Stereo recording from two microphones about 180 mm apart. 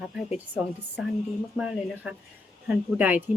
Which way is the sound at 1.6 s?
5° right (ahead or behind).